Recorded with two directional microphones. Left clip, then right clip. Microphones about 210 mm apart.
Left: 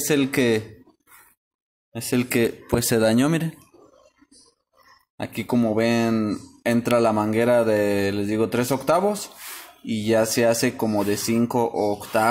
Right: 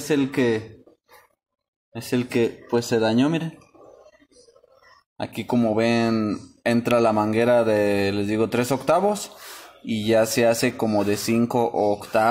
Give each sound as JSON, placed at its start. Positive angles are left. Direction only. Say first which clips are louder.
{"t": 0.1, "sound": "speech", "louder": "left 1 dB", "side_deg": 30}
{"t": 1.9, "sound": "speech", "louder": "left 2 dB", "side_deg": 15}
{"t": 2.7, "sound": "speech", "louder": "left 1 dB", "side_deg": 35}
{"t": 5.1, "sound": "speech", "louder": "even", "side_deg": 10}